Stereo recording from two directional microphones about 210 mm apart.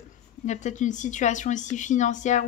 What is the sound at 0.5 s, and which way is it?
A woman's voice, 35° left (ahead or behind).